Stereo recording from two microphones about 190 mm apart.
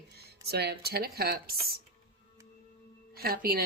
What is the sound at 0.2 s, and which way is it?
Speech, 55° right (ahead or behind).